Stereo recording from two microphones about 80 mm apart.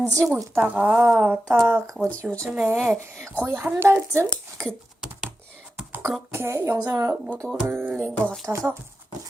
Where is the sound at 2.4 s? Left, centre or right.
Centre.